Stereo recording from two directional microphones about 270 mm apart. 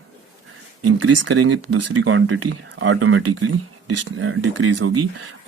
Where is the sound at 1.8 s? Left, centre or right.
Right.